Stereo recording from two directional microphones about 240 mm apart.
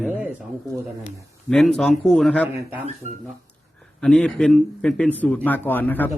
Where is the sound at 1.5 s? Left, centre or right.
Centre.